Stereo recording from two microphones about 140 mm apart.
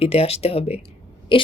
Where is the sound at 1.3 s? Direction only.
40° left (ahead or behind).